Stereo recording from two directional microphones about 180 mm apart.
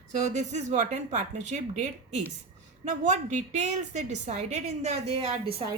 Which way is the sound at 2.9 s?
40° right (ahead or behind).